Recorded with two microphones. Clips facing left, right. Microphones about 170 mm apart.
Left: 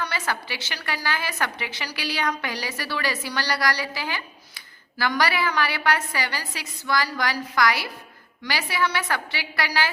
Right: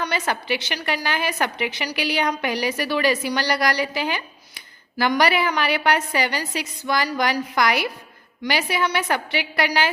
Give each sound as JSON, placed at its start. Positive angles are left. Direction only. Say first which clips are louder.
{"t": 0.0, "sound": "a woman's voice", "louder": "right 4 dB", "side_deg": -20}